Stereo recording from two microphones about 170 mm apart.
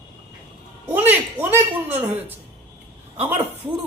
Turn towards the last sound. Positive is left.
turn(degrees=-10)  # may be behind; listen again after turning